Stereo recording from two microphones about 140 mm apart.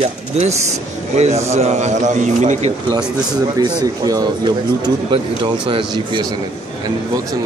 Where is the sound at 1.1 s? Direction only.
50° right (ahead or behind).